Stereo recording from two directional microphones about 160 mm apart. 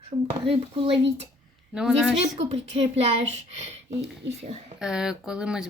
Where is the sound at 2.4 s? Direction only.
45° right (ahead or behind).